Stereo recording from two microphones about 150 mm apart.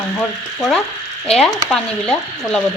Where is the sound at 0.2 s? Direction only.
5° left (ahead or behind).